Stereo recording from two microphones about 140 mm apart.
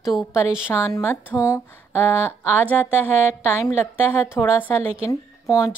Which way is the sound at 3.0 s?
15° left (ahead or behind).